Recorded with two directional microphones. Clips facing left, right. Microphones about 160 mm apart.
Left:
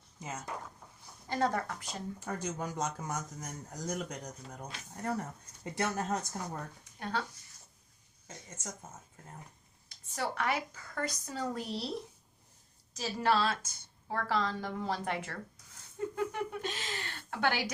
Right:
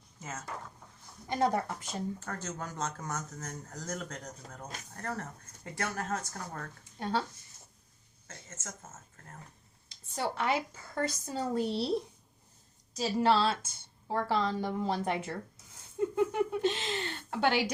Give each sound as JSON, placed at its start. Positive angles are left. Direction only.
{"t": 0.2, "sound": "speech", "side_deg": 15}
{"t": 1.3, "sound": "a woman's voice", "side_deg": -20}
{"t": 2.1, "sound": "speech", "side_deg": 10}
{"t": 7.0, "sound": "a woman's voice", "side_deg": -30}
{"t": 8.3, "sound": "speech", "side_deg": 15}
{"t": 9.9, "sound": "a woman's voice", "side_deg": -25}
{"t": 13.0, "sound": "a woman's voice", "side_deg": -30}